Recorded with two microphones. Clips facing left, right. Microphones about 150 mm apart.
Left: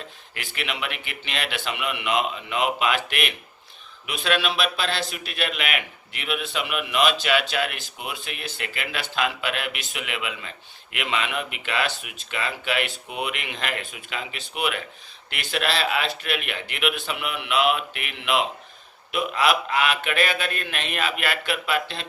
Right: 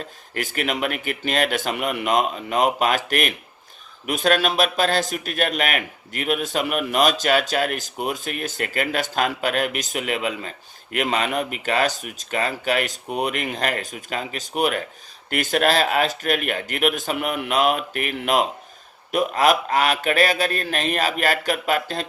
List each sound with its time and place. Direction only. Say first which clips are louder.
0.3 s a man's voice: right 7 dB; 45° right (ahead or behind)